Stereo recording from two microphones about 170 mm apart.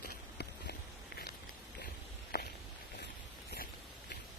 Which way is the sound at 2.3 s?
70° left (ahead or behind).